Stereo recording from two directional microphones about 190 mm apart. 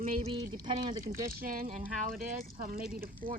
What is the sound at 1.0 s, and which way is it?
Speech, 50° right (ahead or behind).